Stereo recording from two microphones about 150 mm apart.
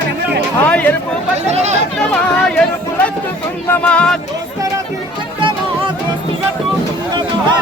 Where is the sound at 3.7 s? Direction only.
10° left (ahead or behind).